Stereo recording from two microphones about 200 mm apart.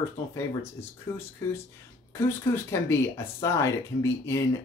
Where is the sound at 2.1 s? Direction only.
15° left (ahead or behind).